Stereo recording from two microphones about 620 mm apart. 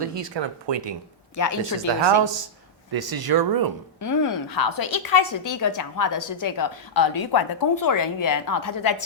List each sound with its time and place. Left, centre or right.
0.0 s speech: right
1.4 s a woman's voice: left
2.9 s speech: right
4.0 s a woman's voice: left